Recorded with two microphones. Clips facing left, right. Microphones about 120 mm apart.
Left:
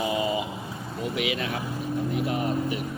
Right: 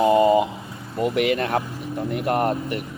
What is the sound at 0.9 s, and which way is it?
Speech, 60° right (ahead or behind).